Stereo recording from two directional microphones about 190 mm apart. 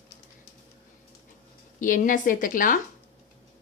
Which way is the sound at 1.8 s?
45° left (ahead or behind).